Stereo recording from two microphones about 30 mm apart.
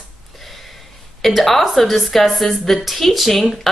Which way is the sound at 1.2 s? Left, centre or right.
Centre.